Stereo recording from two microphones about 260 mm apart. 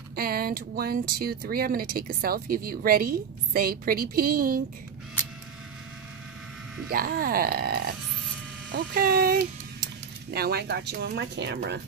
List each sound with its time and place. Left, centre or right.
0.1 s speech: right
6.9 s speech: right